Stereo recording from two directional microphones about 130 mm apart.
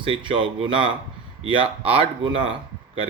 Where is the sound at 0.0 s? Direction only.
40° right (ahead or behind).